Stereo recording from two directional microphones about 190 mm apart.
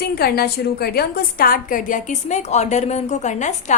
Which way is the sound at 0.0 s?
55° left (ahead or behind).